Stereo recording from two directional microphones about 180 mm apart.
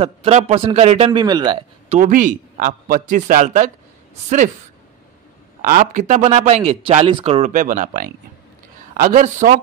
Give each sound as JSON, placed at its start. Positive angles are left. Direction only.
{"t": 0.0, "sound": "a man's voice", "side_deg": -35}
{"t": 1.2, "sound": "speech", "side_deg": -25}
{"t": 1.9, "sound": "a man's voice", "side_deg": -45}
{"t": 5.6, "sound": "a man's voice", "side_deg": -45}